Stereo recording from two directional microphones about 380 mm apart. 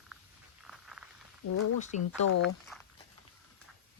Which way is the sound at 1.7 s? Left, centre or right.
Centre.